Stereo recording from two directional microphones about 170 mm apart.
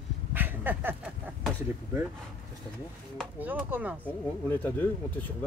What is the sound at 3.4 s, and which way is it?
Speech, 10° right (ahead or behind).